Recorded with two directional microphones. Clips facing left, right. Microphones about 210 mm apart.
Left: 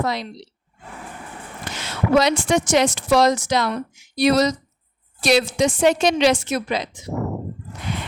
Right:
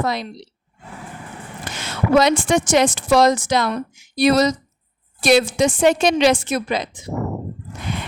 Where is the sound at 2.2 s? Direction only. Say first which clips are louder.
Right 2 dB; 50° right (ahead or behind).